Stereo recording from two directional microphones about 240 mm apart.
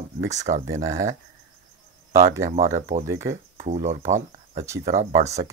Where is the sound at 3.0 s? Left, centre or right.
Centre.